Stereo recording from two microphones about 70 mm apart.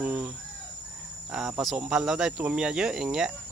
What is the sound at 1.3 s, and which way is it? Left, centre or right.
Speech, centre.